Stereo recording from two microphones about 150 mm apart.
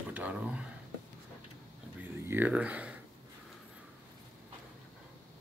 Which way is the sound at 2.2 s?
10° right (ahead or behind).